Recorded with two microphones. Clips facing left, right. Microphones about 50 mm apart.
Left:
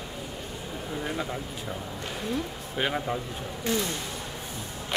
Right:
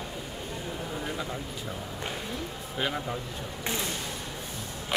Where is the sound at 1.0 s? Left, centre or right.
Centre.